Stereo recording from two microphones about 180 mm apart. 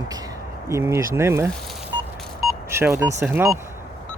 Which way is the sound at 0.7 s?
15° right (ahead or behind).